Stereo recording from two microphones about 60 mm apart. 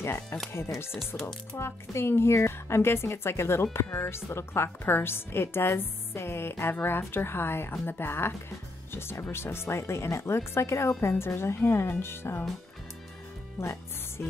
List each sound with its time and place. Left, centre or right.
0.0 s speech: left
1.6 s a woman's voice: left
13.6 s music: left